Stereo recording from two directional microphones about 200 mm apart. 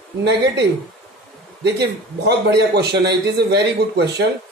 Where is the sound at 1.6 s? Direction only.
60° right (ahead or behind).